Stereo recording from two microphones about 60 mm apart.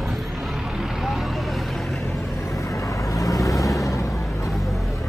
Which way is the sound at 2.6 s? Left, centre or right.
Left.